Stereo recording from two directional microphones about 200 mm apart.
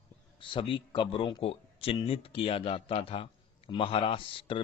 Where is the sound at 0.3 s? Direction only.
25° left (ahead or behind).